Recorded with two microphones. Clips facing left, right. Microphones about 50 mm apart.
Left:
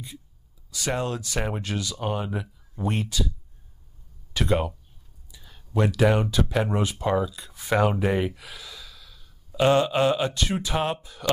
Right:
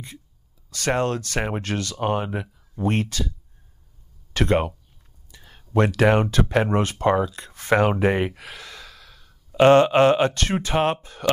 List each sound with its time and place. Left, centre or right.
0.7 s speech: right
2.0 s speech: right
5.3 s a sound: right
5.7 s speech: right